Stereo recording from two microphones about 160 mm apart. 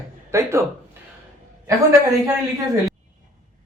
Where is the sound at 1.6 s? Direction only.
20° right (ahead or behind).